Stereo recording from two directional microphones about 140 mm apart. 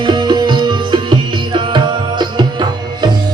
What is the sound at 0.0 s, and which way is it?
Tabla, 30° right (ahead or behind).